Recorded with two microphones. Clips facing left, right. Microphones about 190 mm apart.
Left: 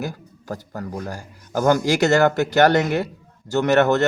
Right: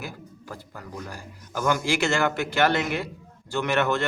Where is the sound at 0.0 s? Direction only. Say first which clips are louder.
Left 8 dB; 45° left (ahead or behind).